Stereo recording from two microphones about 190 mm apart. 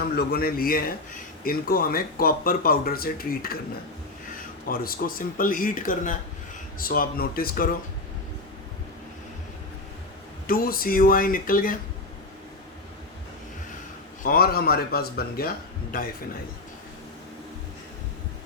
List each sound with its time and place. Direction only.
0.2 s speech: 55° left (ahead or behind)
4.7 s speech: 50° left (ahead or behind)
10.4 s speech: 50° left (ahead or behind)
14.3 s speech: 55° left (ahead or behind)